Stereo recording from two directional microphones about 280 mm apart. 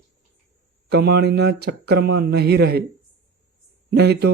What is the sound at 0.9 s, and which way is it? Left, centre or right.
Speech, right.